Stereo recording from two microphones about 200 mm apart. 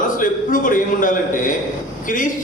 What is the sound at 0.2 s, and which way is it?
A man's voice, 40° left (ahead or behind).